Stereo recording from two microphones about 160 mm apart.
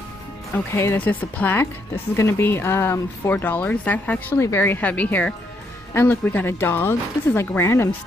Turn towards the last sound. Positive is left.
turn(degrees=15)  # may be behind; listen again after turning